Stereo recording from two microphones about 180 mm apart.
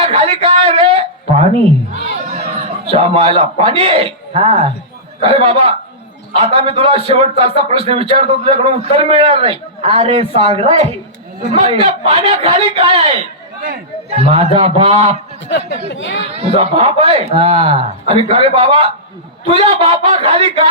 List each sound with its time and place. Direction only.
0.1 s a man's voice: 30° right (ahead or behind)
15.4 s speech: 70° left (ahead or behind)
16.3 s speech: 35° right (ahead or behind)